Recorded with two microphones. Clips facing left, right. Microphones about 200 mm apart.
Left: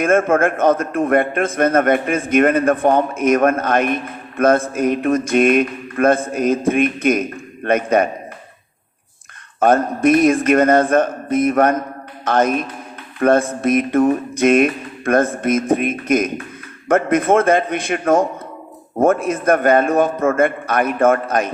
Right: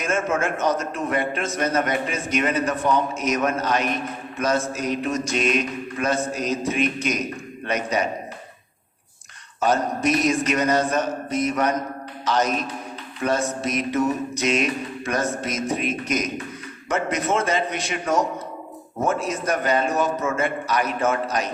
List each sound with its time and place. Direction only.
0.0 s a man's voice: 55° left (ahead or behind)
9.6 s a man's voice: 55° left (ahead or behind)